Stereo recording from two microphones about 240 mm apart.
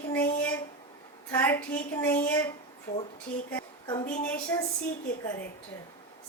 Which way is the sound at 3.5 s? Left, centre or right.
Centre.